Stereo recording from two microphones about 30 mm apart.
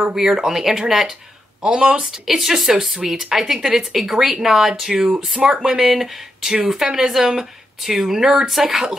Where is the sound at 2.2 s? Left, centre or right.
Centre.